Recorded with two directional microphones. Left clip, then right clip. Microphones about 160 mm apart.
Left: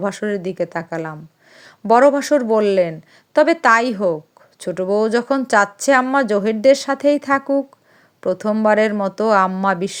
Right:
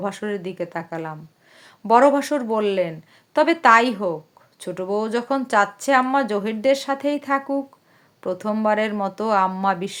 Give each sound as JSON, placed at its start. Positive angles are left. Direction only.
{"t": 0.0, "sound": "speech", "side_deg": 30}